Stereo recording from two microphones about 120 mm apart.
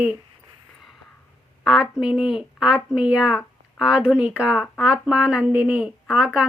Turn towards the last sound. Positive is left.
turn(degrees=-10)  # may be behind; listen again after turning